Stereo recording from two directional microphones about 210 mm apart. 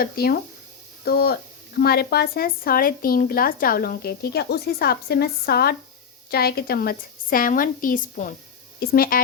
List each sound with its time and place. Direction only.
0.0 s a woman's voice: 45° left (ahead or behind)